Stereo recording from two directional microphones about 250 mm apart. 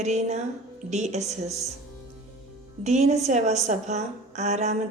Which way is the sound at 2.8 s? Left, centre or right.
Right.